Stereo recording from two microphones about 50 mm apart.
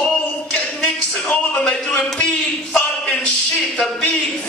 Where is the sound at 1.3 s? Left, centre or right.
Centre.